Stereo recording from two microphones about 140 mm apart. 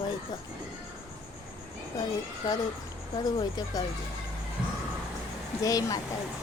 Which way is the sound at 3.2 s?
30° left (ahead or behind).